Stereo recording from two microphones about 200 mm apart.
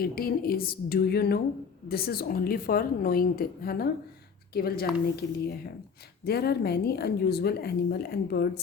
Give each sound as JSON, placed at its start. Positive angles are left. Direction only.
{"t": 0.0, "sound": "a woman's voice", "side_deg": 50}
{"t": 6.2, "sound": "a woman's voice", "side_deg": 50}